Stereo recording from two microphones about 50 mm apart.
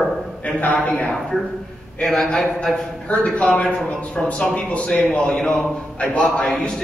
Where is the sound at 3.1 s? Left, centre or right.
Left.